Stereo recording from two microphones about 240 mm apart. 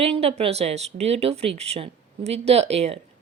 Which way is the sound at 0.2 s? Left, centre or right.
Right.